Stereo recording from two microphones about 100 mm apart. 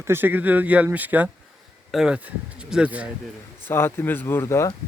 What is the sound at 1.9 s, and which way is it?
Speech, 5° right (ahead or behind).